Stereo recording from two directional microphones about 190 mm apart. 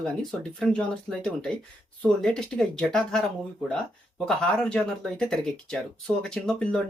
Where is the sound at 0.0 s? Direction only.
Centre (ahead or behind).